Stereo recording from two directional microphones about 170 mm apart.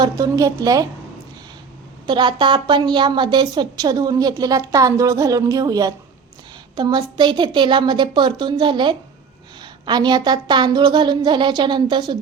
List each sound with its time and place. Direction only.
0.0 s a woman's voice: 20° right (ahead or behind)
2.0 s a woman's voice: 25° right (ahead or behind)